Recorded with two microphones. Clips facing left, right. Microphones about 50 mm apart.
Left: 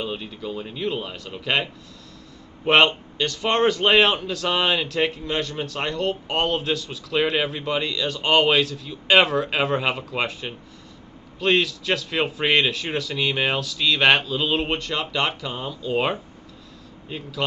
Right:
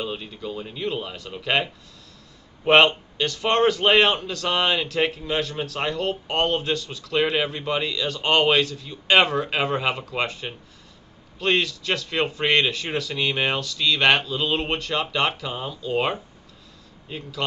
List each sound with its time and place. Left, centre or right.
0.0 s a man's voice: centre